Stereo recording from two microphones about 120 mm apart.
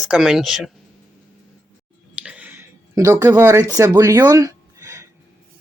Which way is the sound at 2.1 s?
10° right (ahead or behind).